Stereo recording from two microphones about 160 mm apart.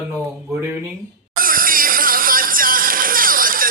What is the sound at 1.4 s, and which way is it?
Music, 60° right (ahead or behind).